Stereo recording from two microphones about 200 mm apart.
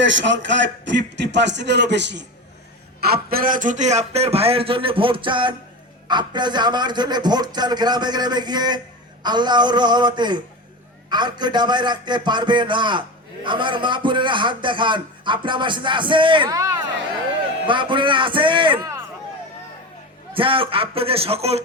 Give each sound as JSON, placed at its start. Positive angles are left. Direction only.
{"t": 0.0, "sound": "a man's voice", "side_deg": -65}
{"t": 3.0, "sound": "a man's voice", "side_deg": -50}
{"t": 20.3, "sound": "a man's voice", "side_deg": -25}